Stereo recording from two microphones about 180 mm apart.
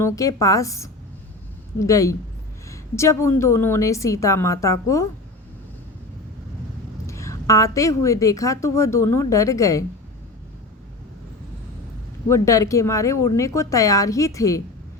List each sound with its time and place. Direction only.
0.0 s a woman's voice: 20° left (ahead or behind)
7.1 s a woman's voice: 15° left (ahead or behind)
12.3 s a woman's voice: 15° left (ahead or behind)